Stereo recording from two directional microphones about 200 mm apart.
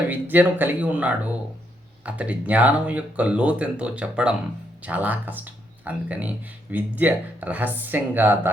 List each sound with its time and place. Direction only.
0.1 s speech: 10° right (ahead or behind)